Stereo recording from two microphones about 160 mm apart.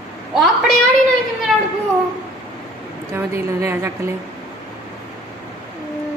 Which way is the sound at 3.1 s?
15° right (ahead or behind).